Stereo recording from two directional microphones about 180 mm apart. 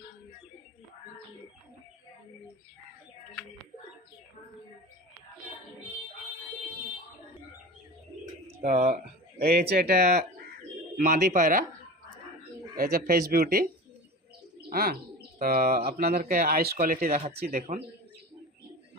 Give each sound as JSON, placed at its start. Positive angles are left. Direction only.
{"t": 8.4, "sound": "speech", "side_deg": -40}
{"t": 9.4, "sound": "speech", "side_deg": -60}
{"t": 10.9, "sound": "speech", "side_deg": -40}
{"t": 12.8, "sound": "speech", "side_deg": -55}
{"t": 14.7, "sound": "speech", "side_deg": -55}
{"t": 17.1, "sound": "speech", "side_deg": -35}
{"t": 17.6, "sound": "speech", "side_deg": -55}